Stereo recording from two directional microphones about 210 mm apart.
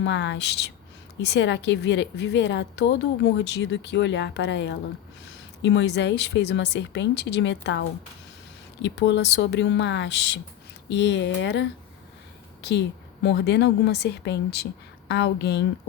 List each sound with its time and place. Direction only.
0.0 s a woman's voice: 55° left (ahead or behind)
13.2 s a woman's voice: 55° left (ahead or behind)